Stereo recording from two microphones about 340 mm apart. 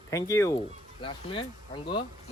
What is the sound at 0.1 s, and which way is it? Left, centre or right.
Speech, centre.